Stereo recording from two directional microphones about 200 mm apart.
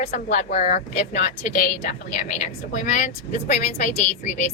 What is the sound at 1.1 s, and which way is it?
A woman's voice, 50° left (ahead or behind).